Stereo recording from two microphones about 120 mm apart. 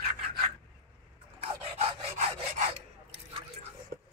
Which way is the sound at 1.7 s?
60° right (ahead or behind).